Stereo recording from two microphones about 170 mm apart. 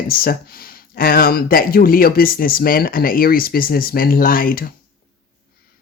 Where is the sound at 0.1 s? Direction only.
60° left (ahead or behind).